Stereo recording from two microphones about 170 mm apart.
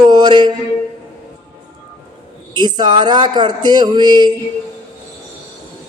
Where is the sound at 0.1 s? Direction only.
25° right (ahead or behind).